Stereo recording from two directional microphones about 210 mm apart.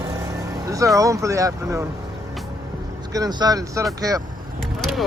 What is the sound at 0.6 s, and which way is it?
Speech, 15° right (ahead or behind).